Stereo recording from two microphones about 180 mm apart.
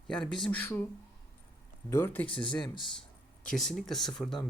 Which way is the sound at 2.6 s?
25° left (ahead or behind).